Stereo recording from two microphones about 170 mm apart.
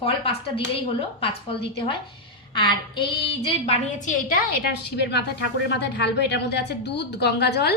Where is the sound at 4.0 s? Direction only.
45° left (ahead or behind).